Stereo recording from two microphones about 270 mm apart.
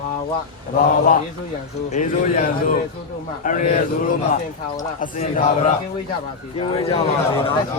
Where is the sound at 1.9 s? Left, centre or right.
Left.